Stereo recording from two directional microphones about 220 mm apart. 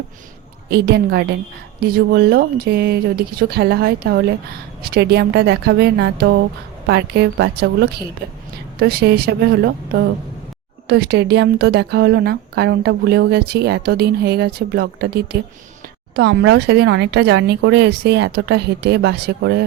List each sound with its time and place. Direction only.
0.7 s a woman's voice: 45° right (ahead or behind)